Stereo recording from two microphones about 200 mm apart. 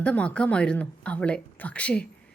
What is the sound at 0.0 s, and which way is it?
A woman's voice, 5° left (ahead or behind).